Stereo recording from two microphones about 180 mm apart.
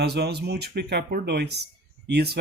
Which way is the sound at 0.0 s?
65° right (ahead or behind).